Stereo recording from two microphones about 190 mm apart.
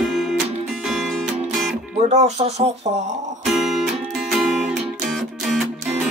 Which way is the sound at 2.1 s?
35° right (ahead or behind).